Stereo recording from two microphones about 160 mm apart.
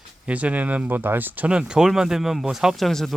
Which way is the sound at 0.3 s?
10° right (ahead or behind).